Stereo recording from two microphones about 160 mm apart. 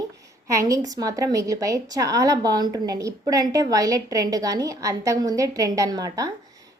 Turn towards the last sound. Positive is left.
turn(degrees=-25)  # may be behind; listen again after turning